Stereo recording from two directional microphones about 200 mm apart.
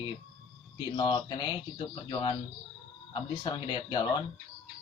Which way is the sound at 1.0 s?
20° left (ahead or behind).